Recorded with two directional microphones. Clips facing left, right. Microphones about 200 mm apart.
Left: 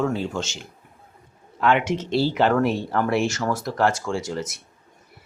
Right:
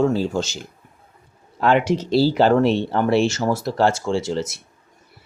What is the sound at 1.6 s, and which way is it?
Speech, 35° right (ahead or behind).